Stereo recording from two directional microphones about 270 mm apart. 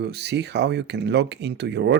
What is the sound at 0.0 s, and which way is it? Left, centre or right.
Speech, right.